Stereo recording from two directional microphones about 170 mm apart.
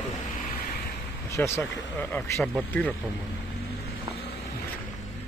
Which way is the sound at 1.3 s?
15° left (ahead or behind).